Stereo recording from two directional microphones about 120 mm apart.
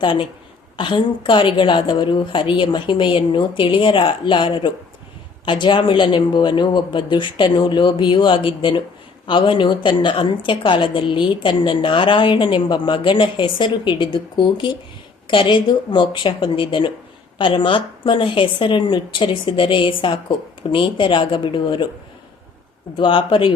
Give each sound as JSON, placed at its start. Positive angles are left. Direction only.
{"t": 0.0, "sound": "a woman's voice", "side_deg": 40}
{"t": 23.0, "sound": "a woman's voice", "side_deg": 45}